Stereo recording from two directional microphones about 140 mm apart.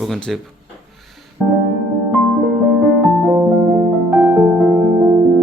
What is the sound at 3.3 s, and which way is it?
Music, 10° right (ahead or behind).